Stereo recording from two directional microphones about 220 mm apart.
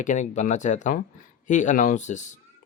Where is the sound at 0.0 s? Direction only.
35° left (ahead or behind).